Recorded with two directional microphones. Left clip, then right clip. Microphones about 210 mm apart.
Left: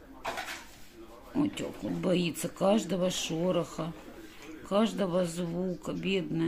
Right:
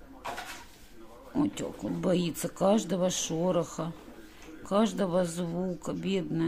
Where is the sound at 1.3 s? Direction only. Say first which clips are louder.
Right 1 dB; 10° right (ahead or behind).